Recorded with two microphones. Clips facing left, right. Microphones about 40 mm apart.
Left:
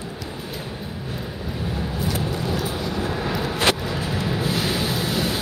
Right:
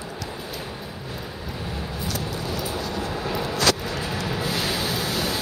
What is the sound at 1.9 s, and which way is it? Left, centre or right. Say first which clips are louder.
Vehicle: left 4 dB; left.